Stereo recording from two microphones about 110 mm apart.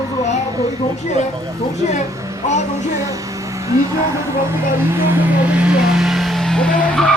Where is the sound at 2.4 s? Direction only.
90° left.